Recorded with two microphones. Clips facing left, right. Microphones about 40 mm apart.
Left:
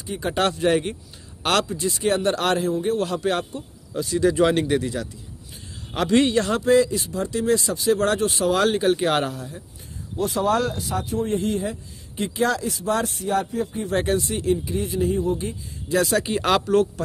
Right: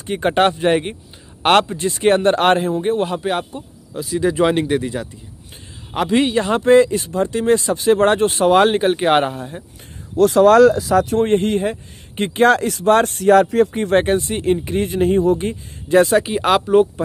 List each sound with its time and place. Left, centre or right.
0.0 s speech: right
0.4 s speech: right
3.9 s speech: centre
4.2 s a man's voice: centre
6.6 s speech: right
10.1 s speech: right
11.1 s speech: right
13.9 s speech: right
15.9 s speech: right
16.2 s a man's voice: centre